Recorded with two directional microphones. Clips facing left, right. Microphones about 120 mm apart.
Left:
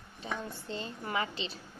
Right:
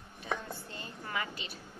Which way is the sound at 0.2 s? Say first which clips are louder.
Right 1 dB; 25° left (ahead or behind).